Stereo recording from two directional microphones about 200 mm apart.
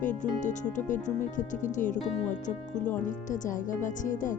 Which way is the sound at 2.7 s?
5° left (ahead or behind).